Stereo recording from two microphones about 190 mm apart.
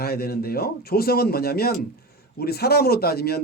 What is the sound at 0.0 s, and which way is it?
Speech, 55° left (ahead or behind).